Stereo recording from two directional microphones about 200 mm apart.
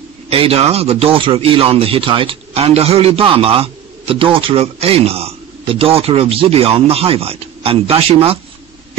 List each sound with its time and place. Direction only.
0.3 s speech: 30° right (ahead or behind)